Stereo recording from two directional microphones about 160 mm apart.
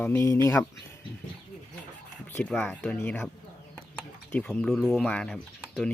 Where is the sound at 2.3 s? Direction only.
10° left (ahead or behind).